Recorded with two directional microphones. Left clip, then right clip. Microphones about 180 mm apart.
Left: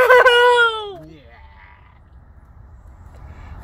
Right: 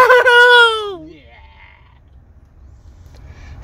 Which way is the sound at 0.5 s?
40° right (ahead or behind).